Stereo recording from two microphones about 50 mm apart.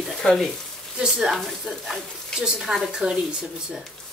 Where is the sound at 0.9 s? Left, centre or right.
Centre.